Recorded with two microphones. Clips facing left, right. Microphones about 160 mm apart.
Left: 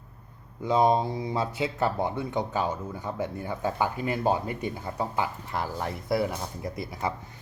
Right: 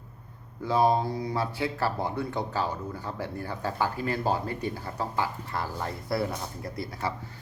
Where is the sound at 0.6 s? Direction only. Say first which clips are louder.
Left 1 dB; 20° left (ahead or behind).